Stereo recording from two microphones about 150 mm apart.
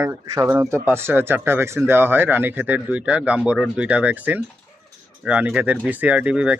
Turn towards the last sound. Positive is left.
turn(degrees=-10)  # may be behind; listen again after turning